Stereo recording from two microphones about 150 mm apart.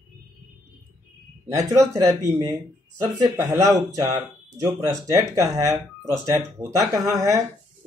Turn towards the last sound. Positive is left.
turn(degrees=-20)  # may be behind; listen again after turning